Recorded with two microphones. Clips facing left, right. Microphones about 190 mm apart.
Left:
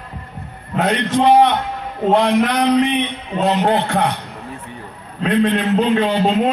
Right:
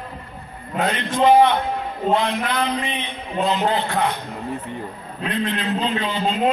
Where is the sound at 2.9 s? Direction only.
70° left (ahead or behind).